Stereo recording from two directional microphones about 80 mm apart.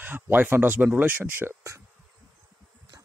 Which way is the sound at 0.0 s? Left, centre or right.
Right.